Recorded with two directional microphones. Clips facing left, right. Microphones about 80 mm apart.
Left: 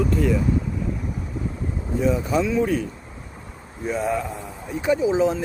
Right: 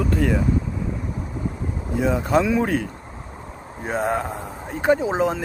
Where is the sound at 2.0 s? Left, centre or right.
Right.